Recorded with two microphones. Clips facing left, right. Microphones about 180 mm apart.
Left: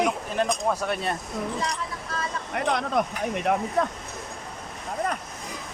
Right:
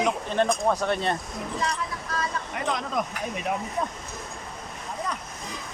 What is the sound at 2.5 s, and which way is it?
Speech, 65° left (ahead or behind).